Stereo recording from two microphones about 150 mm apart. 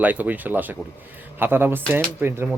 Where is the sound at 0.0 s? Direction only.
10° right (ahead or behind).